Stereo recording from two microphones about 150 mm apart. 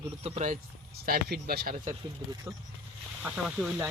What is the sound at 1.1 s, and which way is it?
Speech, 90° right.